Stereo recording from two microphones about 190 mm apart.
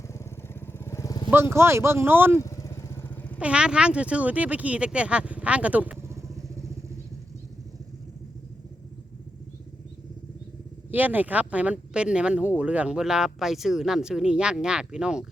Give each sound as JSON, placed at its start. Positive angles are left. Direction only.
{"t": 0.1, "sound": "vehicle", "side_deg": 10}
{"t": 1.3, "sound": "speech", "side_deg": -10}
{"t": 2.4, "sound": "motorcycle", "side_deg": 15}
{"t": 3.3, "sound": "speech", "side_deg": -5}
{"t": 10.9, "sound": "speech", "side_deg": -10}